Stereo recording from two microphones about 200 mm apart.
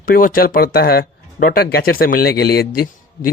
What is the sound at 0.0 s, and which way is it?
Speech, 45° left (ahead or behind).